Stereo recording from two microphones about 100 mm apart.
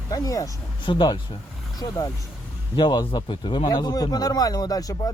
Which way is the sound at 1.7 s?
40° left (ahead or behind).